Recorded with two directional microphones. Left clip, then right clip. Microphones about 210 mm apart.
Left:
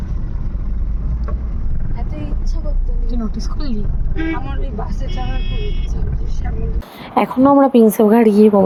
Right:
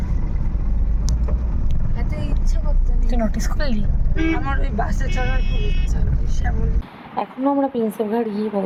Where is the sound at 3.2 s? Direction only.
5° right (ahead or behind).